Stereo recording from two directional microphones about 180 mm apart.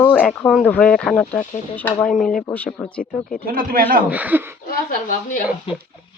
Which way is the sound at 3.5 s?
50° right (ahead or behind).